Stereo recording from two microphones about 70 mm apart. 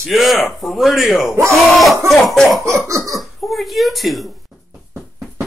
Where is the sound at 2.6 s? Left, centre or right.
Right.